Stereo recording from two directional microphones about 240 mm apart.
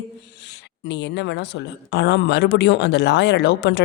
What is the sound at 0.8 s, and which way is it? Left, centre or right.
A woman's voice, left.